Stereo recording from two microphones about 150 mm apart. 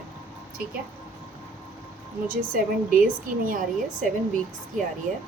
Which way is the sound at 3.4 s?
65° right (ahead or behind).